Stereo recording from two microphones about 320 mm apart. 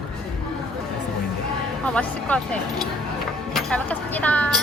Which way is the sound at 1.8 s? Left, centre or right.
Centre.